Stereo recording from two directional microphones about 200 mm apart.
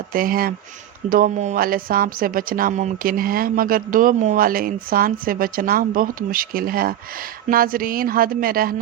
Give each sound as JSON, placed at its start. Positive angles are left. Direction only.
{"t": 0.1, "sound": "speech", "side_deg": -45}